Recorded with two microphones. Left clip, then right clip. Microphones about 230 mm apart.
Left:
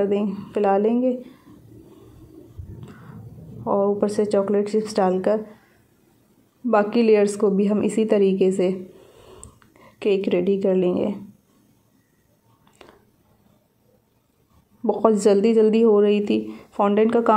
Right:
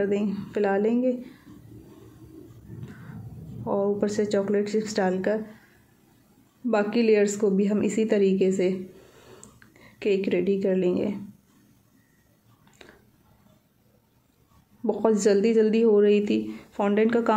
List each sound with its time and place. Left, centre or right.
0.0 s a woman's voice: centre
3.6 s a woman's voice: centre
6.7 s a woman's voice: centre
9.8 s speech: centre
14.8 s a woman's voice: centre